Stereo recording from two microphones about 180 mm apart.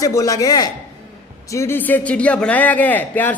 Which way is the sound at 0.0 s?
20° left (ahead or behind).